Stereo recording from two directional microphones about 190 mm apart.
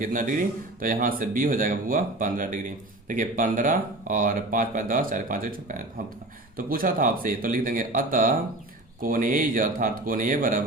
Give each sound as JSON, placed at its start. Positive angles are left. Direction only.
{"t": 0.0, "sound": "speech", "side_deg": -45}